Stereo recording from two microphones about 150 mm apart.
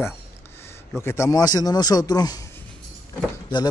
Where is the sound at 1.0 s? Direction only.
15° left (ahead or behind).